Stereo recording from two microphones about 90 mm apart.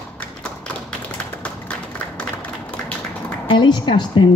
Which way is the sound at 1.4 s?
15° left (ahead or behind).